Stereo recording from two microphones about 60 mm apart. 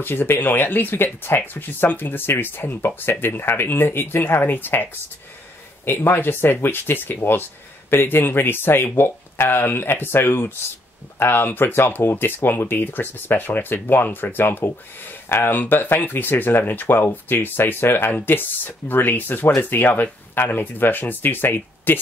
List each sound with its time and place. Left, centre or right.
0.0 s speech: left
5.9 s speech: left